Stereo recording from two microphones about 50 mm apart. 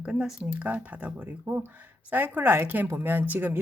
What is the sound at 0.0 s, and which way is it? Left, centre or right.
Speech, centre.